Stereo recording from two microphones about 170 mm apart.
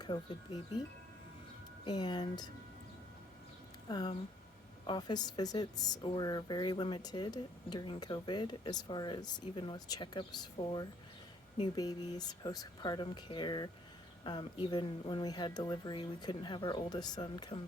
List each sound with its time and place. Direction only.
1.8 s speech: 25° left (ahead or behind)
3.8 s speech: 25° left (ahead or behind)